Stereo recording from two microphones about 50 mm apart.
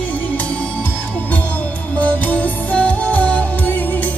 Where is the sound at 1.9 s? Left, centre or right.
Left.